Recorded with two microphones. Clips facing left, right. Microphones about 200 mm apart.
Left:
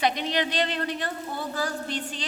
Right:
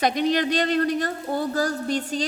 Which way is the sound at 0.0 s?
45° right (ahead or behind).